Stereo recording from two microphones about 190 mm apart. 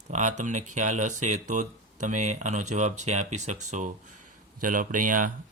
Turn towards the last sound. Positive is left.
turn(degrees=-45)  # may be behind; listen again after turning